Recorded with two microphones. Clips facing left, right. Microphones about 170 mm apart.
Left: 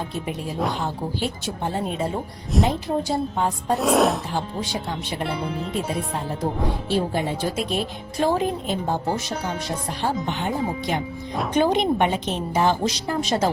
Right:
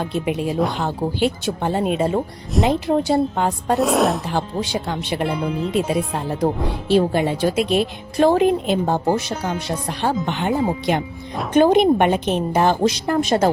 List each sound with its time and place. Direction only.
0.0 s a woman's voice: 85° right
2.6 s a woman's voice: 65° right (ahead or behind)
3.8 s a woman's voice: centre (ahead or behind)
4.3 s a woman's voice: 75° right (ahead or behind)
6.4 s a woman's voice: 80° right
11.5 s a woman's voice: 55° right (ahead or behind)